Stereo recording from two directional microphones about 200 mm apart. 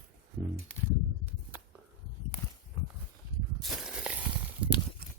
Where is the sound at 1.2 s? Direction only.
10° right (ahead or behind).